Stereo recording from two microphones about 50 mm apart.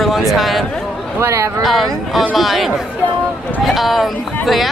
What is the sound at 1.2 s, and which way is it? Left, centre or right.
Speech, right.